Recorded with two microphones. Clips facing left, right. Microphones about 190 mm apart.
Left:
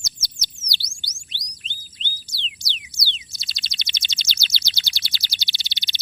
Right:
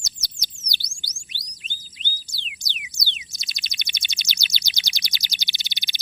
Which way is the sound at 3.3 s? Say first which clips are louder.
Left 1 dB; 15° right (ahead or behind).